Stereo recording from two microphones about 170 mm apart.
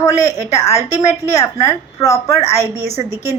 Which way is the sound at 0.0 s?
20° left (ahead or behind).